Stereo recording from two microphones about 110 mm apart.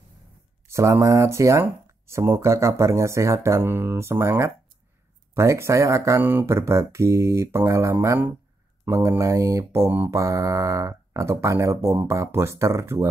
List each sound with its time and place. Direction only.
0.7 s speech: 25° right (ahead or behind)
10.2 s speech: 30° right (ahead or behind)